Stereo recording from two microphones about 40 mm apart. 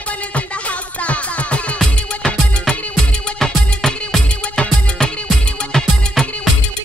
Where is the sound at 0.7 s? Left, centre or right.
Left.